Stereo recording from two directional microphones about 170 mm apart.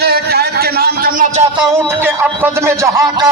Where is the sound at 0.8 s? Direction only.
60° right (ahead or behind).